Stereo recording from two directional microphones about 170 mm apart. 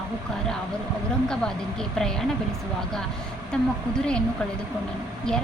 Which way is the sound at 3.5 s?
5° left (ahead or behind).